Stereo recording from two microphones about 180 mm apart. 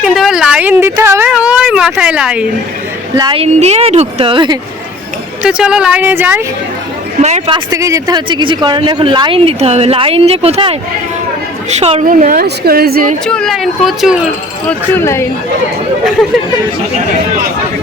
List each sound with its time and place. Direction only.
0.0 s a sound: centre (ahead or behind)
3.2 s speech: 25° right (ahead or behind)
5.4 s speech: 5° right (ahead or behind)
7.2 s speech: 40° right (ahead or behind)
7.5 s speech: 20° right (ahead or behind); by 12.0 s 35° right (ahead or behind)
12.0 s a woman's voice: 50° right (ahead or behind)
13.2 s speech: 5° left (ahead or behind)
14.7 s speech: 15° left (ahead or behind)